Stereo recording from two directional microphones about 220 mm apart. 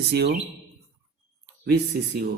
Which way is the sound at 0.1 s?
50° right (ahead or behind).